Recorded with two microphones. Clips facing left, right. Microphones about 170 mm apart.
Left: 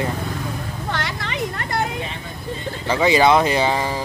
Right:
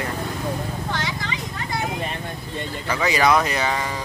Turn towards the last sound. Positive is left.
turn(degrees=30)  # may be behind; listen again after turning